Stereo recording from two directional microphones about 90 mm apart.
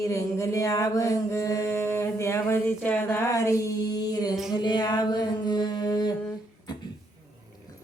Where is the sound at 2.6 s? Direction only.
15° left (ahead or behind).